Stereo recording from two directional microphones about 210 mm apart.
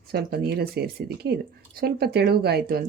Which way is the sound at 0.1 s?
50° right (ahead or behind).